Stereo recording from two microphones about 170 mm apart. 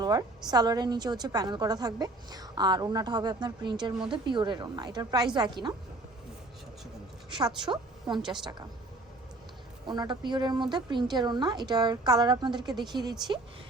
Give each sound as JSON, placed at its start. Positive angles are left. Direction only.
{"t": 0.0, "sound": "a woman's voice", "side_deg": -25}
{"t": 7.3, "sound": "a woman's voice", "side_deg": -25}
{"t": 9.8, "sound": "a woman's voice", "side_deg": -25}